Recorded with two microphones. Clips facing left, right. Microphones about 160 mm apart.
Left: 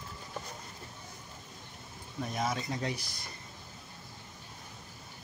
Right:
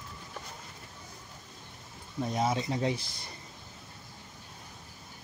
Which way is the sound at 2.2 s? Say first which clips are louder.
Right 4 dB; 25° right (ahead or behind).